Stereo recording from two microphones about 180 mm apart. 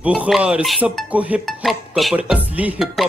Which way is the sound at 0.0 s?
5° right (ahead or behind).